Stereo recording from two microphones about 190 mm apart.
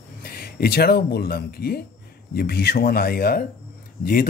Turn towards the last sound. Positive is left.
turn(degrees=50)  # may be behind; listen again after turning